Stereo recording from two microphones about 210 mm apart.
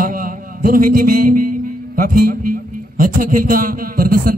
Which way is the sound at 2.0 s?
40° right (ahead or behind).